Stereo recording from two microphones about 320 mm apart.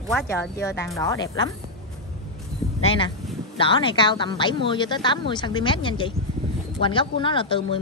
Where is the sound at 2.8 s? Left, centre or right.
Centre.